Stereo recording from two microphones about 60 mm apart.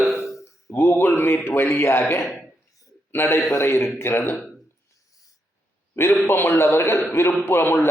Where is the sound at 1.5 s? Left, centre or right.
Left.